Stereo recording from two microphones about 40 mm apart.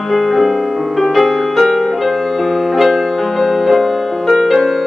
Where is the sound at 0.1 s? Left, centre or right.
Centre.